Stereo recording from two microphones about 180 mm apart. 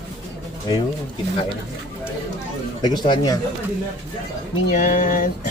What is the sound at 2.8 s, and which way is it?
Speech, 25° left (ahead or behind).